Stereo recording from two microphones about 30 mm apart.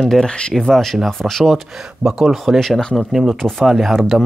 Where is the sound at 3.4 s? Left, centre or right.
Right.